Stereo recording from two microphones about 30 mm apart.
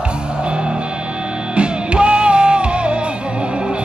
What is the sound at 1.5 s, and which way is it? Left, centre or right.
Music, right.